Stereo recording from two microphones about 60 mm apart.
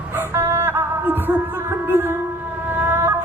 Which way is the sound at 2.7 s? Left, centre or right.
Right.